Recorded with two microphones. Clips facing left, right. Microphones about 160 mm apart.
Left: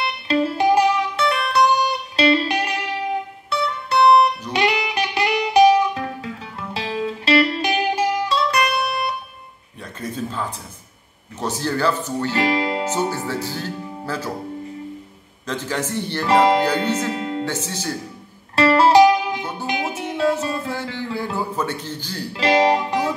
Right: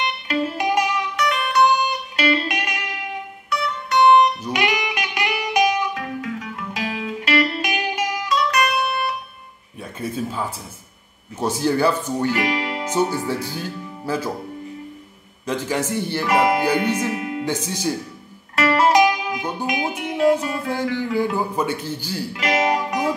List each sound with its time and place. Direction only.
0.0 s music: 30° left (ahead or behind)
9.9 s a sound: 10° right (ahead or behind)
11.3 s speech: 10° right (ahead or behind)
12.3 s music: 30° left (ahead or behind)
12.9 s speech: 15° right (ahead or behind)
15.4 s speech: 10° right (ahead or behind)
17.2 s music: 30° left (ahead or behind)
17.5 s speech: 15° right (ahead or behind)
18.6 s music: 30° left (ahead or behind)
20.2 s music: 15° right (ahead or behind)
21.1 s a man's voice: 15° right (ahead or behind)
22.3 s music: 30° left (ahead or behind)